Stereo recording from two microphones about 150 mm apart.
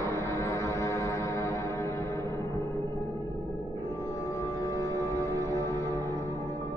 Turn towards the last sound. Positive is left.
turn(degrees=20)  # may be behind; listen again after turning